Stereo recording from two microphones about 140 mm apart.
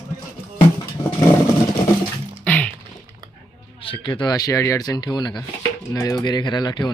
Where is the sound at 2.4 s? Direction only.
10° left (ahead or behind).